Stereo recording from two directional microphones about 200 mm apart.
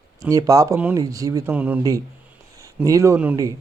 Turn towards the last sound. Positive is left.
turn(degrees=-10)  # may be behind; listen again after turning